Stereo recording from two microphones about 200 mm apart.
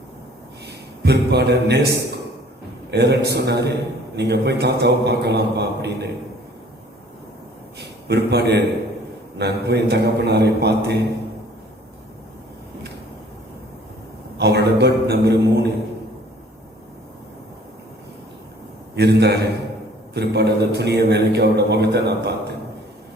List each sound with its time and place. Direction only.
0.6 s a man's voice: 55° right (ahead or behind)
7.8 s a man's voice: 55° right (ahead or behind)
14.3 s a man's voice: 55° right (ahead or behind)
18.9 s a man's voice: 55° right (ahead or behind)